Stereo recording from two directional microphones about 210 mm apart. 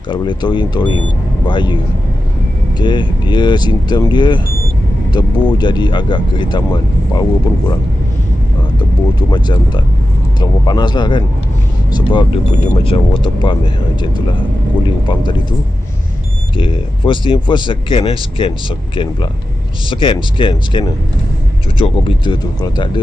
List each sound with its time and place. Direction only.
0.1 s speech: 20° left (ahead or behind)
2.8 s speech: 20° left (ahead or behind)
10.4 s speech: 20° left (ahead or behind)
16.5 s speech: 25° left (ahead or behind)
19.9 s speech: 25° left (ahead or behind)